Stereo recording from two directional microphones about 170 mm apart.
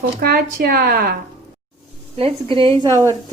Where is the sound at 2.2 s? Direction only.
30° right (ahead or behind).